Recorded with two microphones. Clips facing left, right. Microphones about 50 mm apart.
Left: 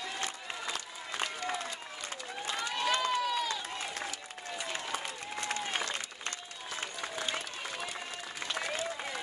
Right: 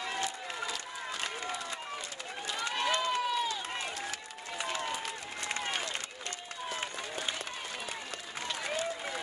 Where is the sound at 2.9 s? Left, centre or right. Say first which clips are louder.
Left 1 dB; right.